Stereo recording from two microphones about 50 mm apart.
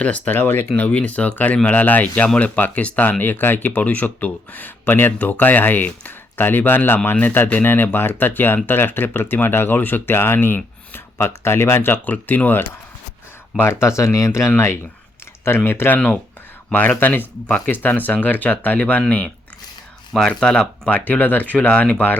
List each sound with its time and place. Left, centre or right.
0.3 s speech: left
0.8 s speech: left
11.3 s speech: left
12.1 s speech: left
13.7 s speech: left
15.4 s speech: left
16.7 s speech: left
19.0 s speech: centre
21.0 s speech: left